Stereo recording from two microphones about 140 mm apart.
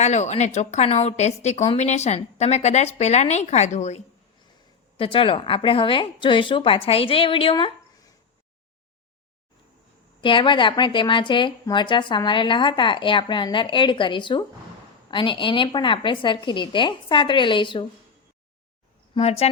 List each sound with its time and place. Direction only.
0.0 s speech: 55° left (ahead or behind)
4.9 s a woman's voice: 40° left (ahead or behind)
10.2 s a woman's voice: 35° left (ahead or behind)
19.1 s speech: 45° left (ahead or behind)